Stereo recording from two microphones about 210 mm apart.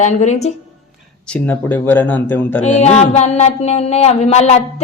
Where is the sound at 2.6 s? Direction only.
35° left (ahead or behind).